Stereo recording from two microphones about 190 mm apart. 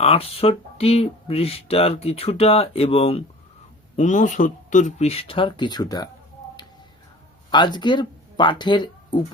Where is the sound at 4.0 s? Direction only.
40° left (ahead or behind); by 6.1 s 20° left (ahead or behind).